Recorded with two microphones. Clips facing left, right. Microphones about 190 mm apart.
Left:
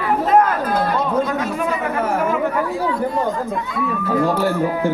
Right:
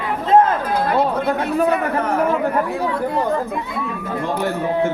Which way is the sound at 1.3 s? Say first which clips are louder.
Right 4 dB; 35° right (ahead or behind).